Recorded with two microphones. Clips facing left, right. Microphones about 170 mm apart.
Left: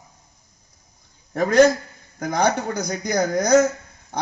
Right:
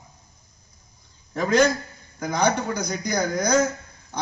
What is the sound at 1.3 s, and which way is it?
A man's voice, 50° left (ahead or behind).